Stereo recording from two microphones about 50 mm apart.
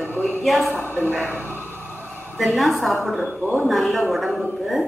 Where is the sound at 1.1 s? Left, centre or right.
Right.